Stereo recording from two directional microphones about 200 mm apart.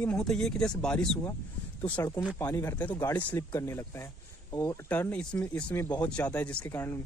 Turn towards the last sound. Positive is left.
turn(degrees=10)  # may be behind; listen again after turning